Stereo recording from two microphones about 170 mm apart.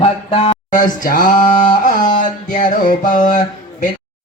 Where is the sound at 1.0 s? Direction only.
55° left (ahead or behind).